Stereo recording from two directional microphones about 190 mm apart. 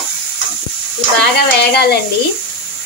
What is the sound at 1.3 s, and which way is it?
Speech, 60° left (ahead or behind).